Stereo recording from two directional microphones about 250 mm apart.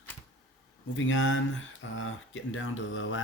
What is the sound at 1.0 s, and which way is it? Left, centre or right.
Speech, left.